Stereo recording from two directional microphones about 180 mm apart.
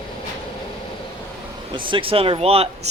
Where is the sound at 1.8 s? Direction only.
30° right (ahead or behind).